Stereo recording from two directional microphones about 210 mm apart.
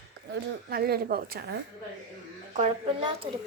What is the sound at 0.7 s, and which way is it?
Speech, 45° right (ahead or behind).